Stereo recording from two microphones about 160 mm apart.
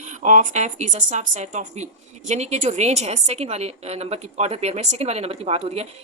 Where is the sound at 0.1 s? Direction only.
50° right (ahead or behind).